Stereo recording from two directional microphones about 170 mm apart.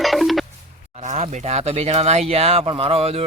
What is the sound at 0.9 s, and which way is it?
Speech, 40° right (ahead or behind).